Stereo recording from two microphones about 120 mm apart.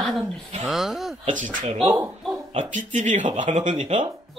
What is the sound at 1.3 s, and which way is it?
Speech, 90° right.